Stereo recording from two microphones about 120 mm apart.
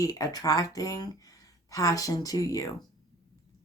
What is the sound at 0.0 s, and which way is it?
Speech, 30° left (ahead or behind).